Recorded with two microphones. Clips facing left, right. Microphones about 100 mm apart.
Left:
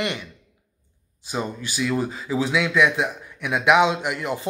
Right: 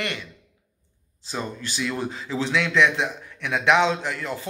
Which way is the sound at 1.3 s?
10° left (ahead or behind).